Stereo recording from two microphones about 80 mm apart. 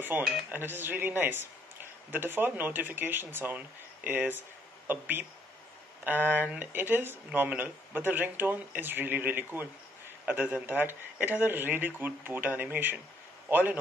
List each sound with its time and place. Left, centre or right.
0.1 s a man's voice: right